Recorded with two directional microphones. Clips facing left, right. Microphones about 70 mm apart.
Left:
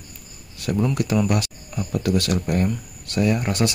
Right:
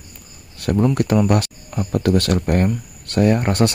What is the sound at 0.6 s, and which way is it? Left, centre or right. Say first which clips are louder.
Speech: right 5 dB; right.